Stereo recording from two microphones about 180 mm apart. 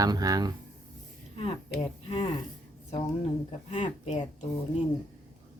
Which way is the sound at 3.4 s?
40° left (ahead or behind).